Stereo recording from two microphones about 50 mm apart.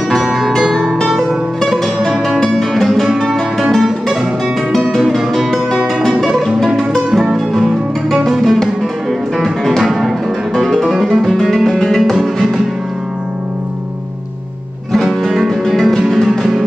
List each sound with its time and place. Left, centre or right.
0.2 s music: centre
0.7 s music: centre
1.0 s music: centre
2.0 s music: centre
2.4 s music: centre
8.2 s music: centre
14.9 s music: centre
15.6 s music: centre